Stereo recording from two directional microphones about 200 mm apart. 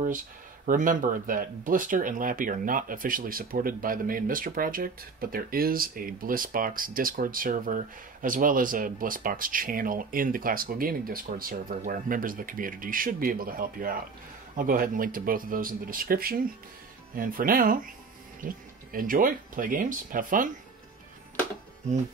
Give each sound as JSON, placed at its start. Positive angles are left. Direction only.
{"t": 0.7, "sound": "speech", "side_deg": -40}